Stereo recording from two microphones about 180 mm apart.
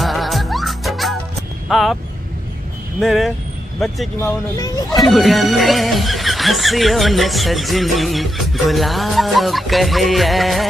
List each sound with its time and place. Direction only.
0.0 s music: centre (ahead or behind)
1.7 s speech: centre (ahead or behind)
3.0 s speech: centre (ahead or behind)
4.2 s speech: 20° left (ahead or behind)
4.8 s speech: centre (ahead or behind)